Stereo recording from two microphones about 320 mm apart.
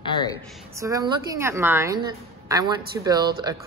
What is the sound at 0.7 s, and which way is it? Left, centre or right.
Speech, centre.